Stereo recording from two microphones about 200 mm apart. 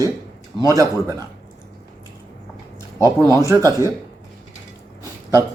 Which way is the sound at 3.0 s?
20° right (ahead or behind).